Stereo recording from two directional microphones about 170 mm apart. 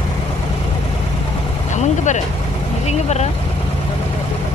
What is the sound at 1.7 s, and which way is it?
Vehicle, 45° left (ahead or behind).